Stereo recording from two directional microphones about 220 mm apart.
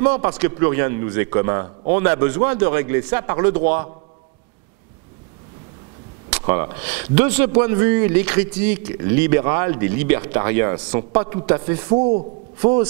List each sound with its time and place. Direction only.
0.0 s speech: 10° right (ahead or behind)
6.4 s speech: 20° right (ahead or behind)
12.5 s a man's voice: 15° right (ahead or behind)